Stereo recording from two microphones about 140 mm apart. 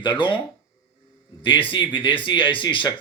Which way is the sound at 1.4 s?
40° left (ahead or behind).